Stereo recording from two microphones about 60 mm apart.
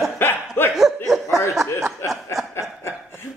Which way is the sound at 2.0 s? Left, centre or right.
Left.